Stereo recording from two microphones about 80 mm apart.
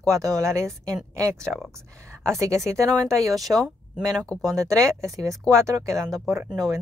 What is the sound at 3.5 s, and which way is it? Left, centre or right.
Speech, right.